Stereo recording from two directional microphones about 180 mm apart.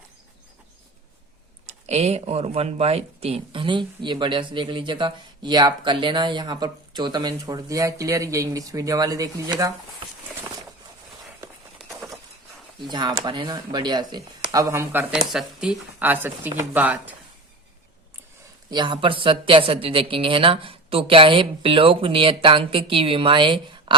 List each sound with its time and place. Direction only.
1.6 s speech: 35° right (ahead or behind); by 9.7 s 20° right (ahead or behind)
11.9 s a sound: 15° right (ahead or behind)
12.8 s speech: 25° right (ahead or behind)
15.3 s speech: centre (ahead or behind)
18.7 s speech: 25° right (ahead or behind)